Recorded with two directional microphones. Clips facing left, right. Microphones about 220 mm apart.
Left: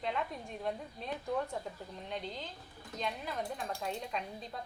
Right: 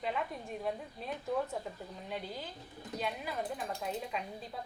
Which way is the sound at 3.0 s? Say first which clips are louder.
Right 1 dB; 5° right (ahead or behind).